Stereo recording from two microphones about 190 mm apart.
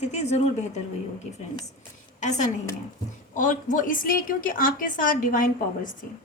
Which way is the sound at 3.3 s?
40° left (ahead or behind).